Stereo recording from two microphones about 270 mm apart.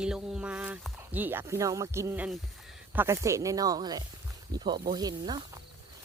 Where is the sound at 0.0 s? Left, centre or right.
Centre.